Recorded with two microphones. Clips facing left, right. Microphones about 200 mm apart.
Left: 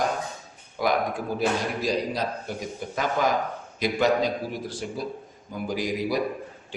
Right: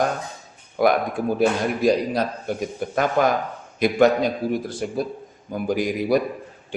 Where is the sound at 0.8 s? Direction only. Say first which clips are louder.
Right 5 dB; 55° right (ahead or behind).